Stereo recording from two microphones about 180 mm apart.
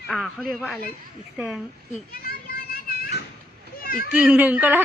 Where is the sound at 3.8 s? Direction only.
55° left (ahead or behind).